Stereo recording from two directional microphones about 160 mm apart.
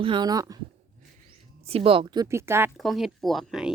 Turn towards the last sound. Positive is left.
turn(degrees=0)  # may be behind; listen again after turning